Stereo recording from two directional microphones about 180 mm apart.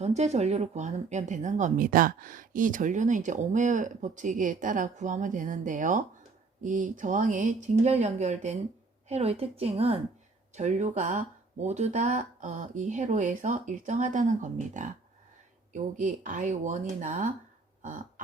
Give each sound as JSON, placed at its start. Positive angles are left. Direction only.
{"t": 0.0, "sound": "a woman's voice", "side_deg": -40}